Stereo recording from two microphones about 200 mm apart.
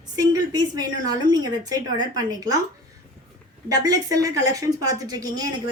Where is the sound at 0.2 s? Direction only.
20° right (ahead or behind).